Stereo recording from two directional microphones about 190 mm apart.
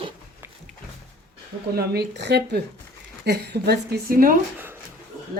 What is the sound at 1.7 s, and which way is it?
A woman's voice, 55° right (ahead or behind).